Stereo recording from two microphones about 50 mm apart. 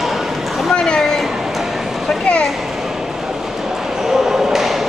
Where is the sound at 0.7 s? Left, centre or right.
Centre.